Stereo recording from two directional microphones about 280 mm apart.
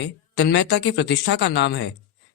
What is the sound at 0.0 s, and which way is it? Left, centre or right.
Speech, left.